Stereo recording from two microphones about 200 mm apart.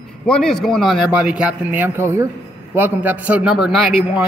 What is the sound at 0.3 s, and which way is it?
A man's voice, centre (ahead or behind).